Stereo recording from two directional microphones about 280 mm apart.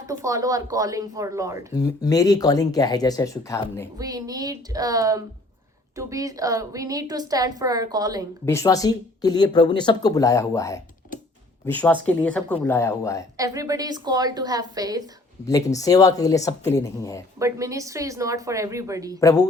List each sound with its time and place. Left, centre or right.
0.0 s a woman's voice: centre
1.7 s speech: centre
3.9 s a woman's voice: centre
8.4 s speech: centre
11.1 s typing: left
11.6 s speech: centre
13.3 s a woman's voice: centre
15.4 s speech: centre
17.4 s a woman's voice: centre
19.2 s speech: centre